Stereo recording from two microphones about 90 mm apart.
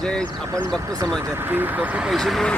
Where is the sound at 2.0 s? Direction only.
Centre (ahead or behind).